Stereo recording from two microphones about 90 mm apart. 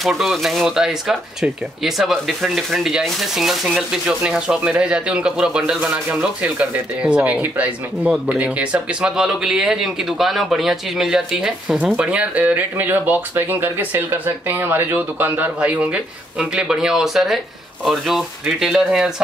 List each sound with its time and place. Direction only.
0.0 s speech: centre (ahead or behind)